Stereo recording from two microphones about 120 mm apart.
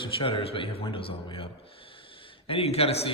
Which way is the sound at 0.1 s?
45° left (ahead or behind).